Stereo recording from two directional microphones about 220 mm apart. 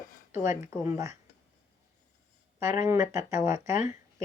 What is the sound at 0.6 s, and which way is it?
Speech, 10° right (ahead or behind).